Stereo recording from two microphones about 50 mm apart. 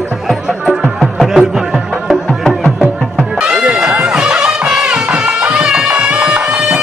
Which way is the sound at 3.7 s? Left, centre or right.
Centre.